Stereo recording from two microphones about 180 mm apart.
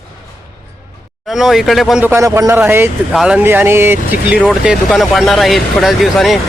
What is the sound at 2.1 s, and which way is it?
Speech, 15° right (ahead or behind).